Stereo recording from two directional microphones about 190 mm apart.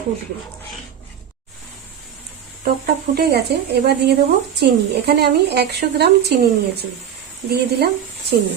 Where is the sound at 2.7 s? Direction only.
55° right (ahead or behind).